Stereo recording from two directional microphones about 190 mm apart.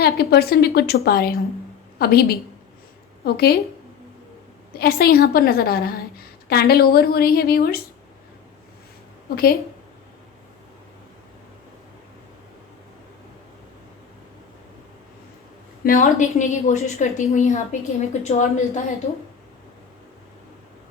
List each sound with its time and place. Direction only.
0.0 s a woman's voice: 55° left (ahead or behind)
4.8 s a woman's voice: 55° left (ahead or behind)
9.3 s a woman's voice: 50° left (ahead or behind)
15.8 s a woman's voice: 50° left (ahead or behind)